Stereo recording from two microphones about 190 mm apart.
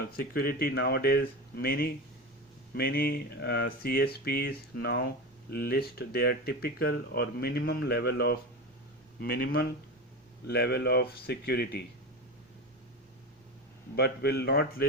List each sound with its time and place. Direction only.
0.0 s speech: 55° left (ahead or behind)
13.9 s speech: 55° left (ahead or behind)